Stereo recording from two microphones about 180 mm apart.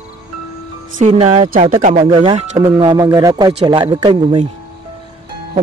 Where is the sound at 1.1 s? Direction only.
30° right (ahead or behind).